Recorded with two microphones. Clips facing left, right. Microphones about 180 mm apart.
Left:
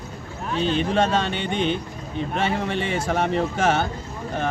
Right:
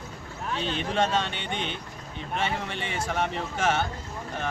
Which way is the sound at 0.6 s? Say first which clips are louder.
Left 6 dB; 35° left (ahead or behind).